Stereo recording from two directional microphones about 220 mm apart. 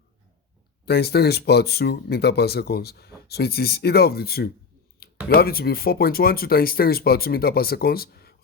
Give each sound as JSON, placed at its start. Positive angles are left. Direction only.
{"t": 0.9, "sound": "speech", "side_deg": 45}